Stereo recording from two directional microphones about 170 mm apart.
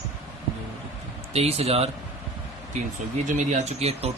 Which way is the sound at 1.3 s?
35° right (ahead or behind).